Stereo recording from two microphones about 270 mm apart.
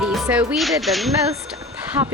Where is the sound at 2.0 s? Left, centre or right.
Centre.